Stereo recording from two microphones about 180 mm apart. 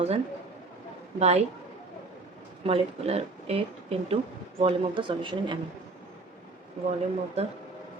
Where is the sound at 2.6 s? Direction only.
35° right (ahead or behind).